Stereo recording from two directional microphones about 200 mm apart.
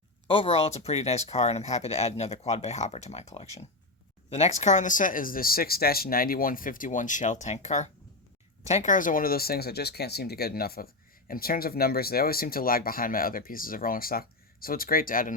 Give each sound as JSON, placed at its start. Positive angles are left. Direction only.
{"t": 0.3, "sound": "speech", "side_deg": 25}